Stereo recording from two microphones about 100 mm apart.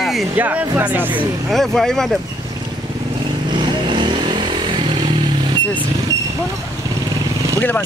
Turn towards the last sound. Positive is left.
turn(degrees=20)  # may be behind; listen again after turning